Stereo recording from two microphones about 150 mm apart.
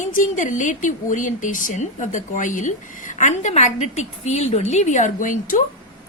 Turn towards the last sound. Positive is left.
turn(degrees=65)  # may be behind; listen again after turning